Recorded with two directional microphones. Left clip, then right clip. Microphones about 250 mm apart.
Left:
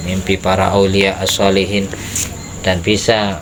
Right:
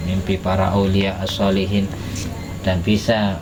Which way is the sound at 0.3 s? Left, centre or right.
Left.